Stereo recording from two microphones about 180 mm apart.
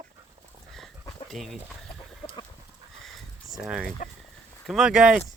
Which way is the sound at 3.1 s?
Centre (ahead or behind).